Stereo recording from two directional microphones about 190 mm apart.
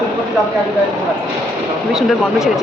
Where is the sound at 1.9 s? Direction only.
Centre (ahead or behind).